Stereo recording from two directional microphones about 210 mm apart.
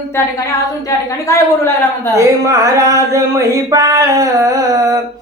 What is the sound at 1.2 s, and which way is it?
Speech, 10° left (ahead or behind).